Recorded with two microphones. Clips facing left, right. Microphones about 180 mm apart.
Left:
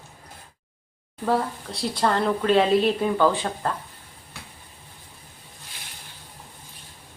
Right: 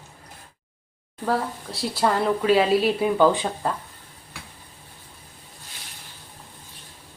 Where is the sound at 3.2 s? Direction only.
15° right (ahead or behind).